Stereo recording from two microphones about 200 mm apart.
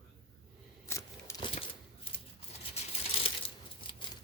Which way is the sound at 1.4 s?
25° left (ahead or behind).